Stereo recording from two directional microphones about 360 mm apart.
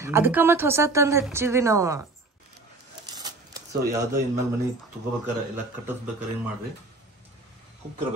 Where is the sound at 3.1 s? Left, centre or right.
Centre.